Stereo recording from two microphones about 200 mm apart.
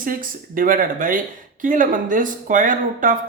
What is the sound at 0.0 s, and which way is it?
Speech, 45° right (ahead or behind).